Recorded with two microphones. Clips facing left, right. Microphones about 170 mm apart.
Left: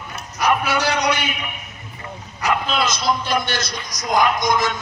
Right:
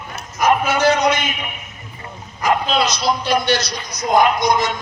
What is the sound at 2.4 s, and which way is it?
Speech, 50° left (ahead or behind).